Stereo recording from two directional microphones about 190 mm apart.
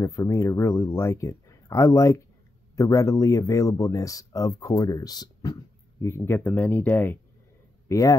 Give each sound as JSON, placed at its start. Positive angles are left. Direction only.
{"t": 0.0, "sound": "speech", "side_deg": 15}